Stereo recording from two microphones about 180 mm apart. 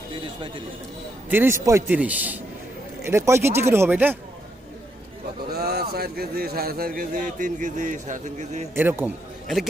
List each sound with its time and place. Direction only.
1.3 s a man's voice: 15° right (ahead or behind)
5.5 s a man's voice: 60° right (ahead or behind); by 8.6 s 40° right (ahead or behind)
8.7 s a man's voice: 10° right (ahead or behind)